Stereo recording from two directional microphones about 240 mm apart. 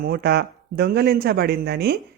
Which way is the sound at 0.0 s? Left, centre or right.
Right.